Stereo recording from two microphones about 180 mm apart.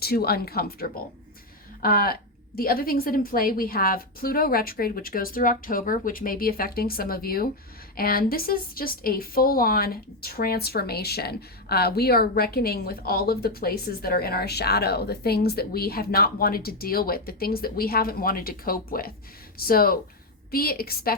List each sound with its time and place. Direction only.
0.0 s a woman's voice: 60° left (ahead or behind)